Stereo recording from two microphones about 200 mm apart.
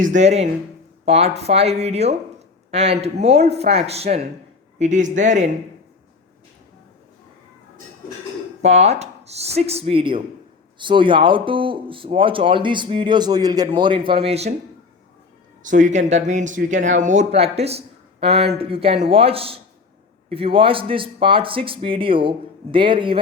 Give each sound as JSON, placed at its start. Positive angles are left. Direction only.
{"t": 0.0, "sound": "speech", "side_deg": -35}
{"t": 8.6, "sound": "speech", "side_deg": -30}
{"t": 15.6, "sound": "speech", "side_deg": -40}